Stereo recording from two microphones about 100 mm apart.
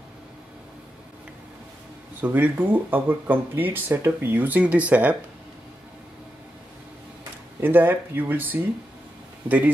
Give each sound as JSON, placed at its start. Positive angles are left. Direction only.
{"t": 2.2, "sound": "speech", "side_deg": -20}
{"t": 7.6, "sound": "speech", "side_deg": -20}